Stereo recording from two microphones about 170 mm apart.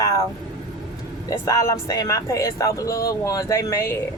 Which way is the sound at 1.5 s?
20° left (ahead or behind).